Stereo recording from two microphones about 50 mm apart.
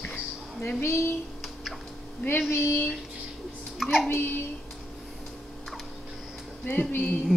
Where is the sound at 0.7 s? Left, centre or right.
Left.